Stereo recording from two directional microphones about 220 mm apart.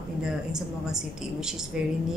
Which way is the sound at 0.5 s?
5° right (ahead or behind).